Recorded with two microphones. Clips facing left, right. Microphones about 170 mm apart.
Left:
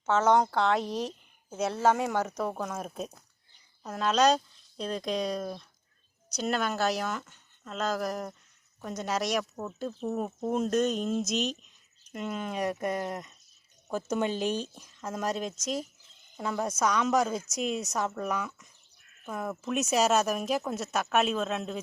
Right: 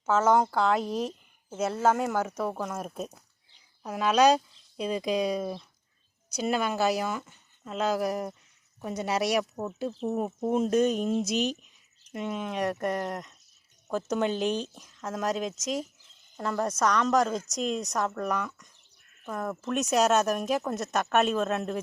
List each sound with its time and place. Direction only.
0.0 s speech: 5° right (ahead or behind)
9.9 s speech: 25° right (ahead or behind)
10.2 s speech: 10° right (ahead or behind)
12.1 s speech: centre (ahead or behind)